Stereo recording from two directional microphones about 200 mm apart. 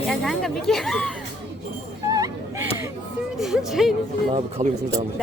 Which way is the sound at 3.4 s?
Centre (ahead or behind).